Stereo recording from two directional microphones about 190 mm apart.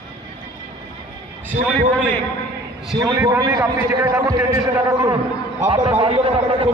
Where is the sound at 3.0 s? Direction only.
15° right (ahead or behind).